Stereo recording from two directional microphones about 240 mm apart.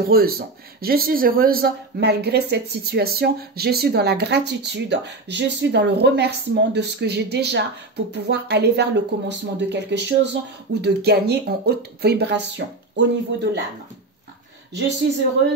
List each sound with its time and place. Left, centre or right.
0.0 s speech: right